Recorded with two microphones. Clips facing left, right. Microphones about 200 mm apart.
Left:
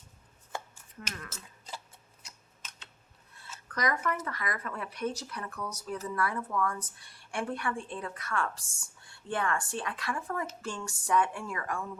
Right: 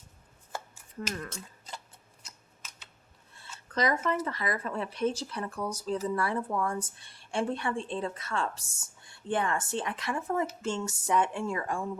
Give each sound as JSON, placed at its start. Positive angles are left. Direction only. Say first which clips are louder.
{"t": 1.3, "sound": "speech", "louder": "right 5 dB", "side_deg": 5}
{"t": 2.6, "sound": "typing", "louder": "left 2 dB", "side_deg": -10}
{"t": 3.7, "sound": "a woman's voice", "louder": "right 3 dB", "side_deg": -25}